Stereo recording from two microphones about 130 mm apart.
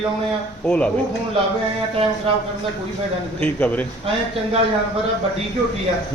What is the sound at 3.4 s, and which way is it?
Speech, 10° left (ahead or behind).